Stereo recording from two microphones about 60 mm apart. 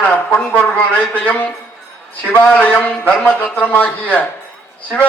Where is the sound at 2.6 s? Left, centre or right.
Left.